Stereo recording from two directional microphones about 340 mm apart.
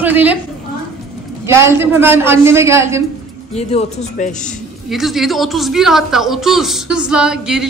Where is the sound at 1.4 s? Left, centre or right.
Centre.